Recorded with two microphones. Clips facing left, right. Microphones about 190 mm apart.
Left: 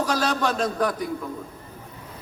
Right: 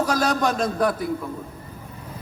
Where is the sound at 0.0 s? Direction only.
10° right (ahead or behind).